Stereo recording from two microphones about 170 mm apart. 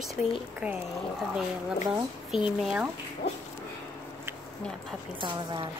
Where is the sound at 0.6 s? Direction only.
10° right (ahead or behind).